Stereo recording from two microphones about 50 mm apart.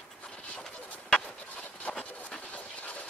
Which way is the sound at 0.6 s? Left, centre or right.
Centre.